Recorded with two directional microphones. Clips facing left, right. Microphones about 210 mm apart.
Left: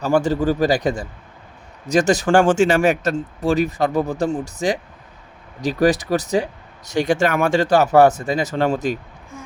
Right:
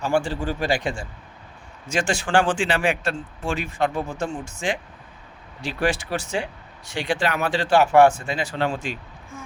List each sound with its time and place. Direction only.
0.0 s speech: 40° left (ahead or behind)